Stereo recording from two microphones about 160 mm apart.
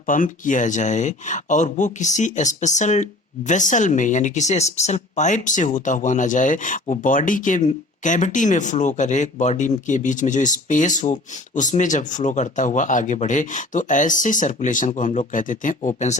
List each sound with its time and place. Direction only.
0.1 s speech: 55° left (ahead or behind)